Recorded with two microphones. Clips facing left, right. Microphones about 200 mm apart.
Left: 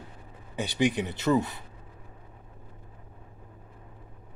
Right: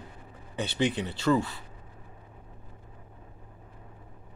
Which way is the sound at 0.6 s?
15° left (ahead or behind).